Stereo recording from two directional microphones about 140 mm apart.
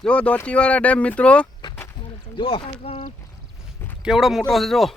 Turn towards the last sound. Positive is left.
turn(degrees=0)  # may be behind; listen again after turning